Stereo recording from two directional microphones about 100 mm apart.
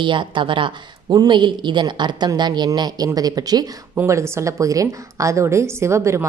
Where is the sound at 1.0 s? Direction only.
45° right (ahead or behind).